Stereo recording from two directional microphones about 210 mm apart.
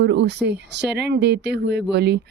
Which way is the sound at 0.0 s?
55° right (ahead or behind).